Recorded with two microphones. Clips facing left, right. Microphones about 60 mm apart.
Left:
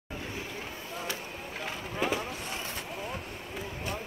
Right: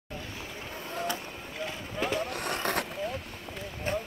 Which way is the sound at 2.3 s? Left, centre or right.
Right.